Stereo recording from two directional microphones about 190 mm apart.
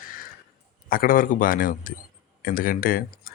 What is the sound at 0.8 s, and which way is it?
Speech, 50° left (ahead or behind).